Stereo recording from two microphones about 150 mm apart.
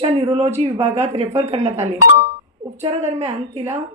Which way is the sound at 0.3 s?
45° right (ahead or behind).